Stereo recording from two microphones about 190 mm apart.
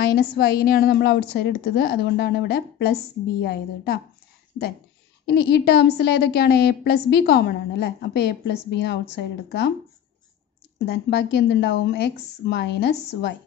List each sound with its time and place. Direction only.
0.0 s a woman's voice: 55° left (ahead or behind)
5.2 s a woman's voice: 60° left (ahead or behind)
10.9 s a woman's voice: 65° left (ahead or behind)